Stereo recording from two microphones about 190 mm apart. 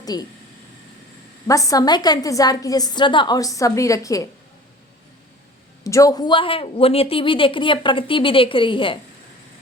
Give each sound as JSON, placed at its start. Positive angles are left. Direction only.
{"t": 0.0, "sound": "speech", "side_deg": 20}
{"t": 1.5, "sound": "a woman's voice", "side_deg": 15}
{"t": 5.8, "sound": "a woman's voice", "side_deg": 15}